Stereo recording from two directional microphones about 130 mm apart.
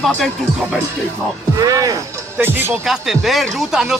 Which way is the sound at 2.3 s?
15° right (ahead or behind).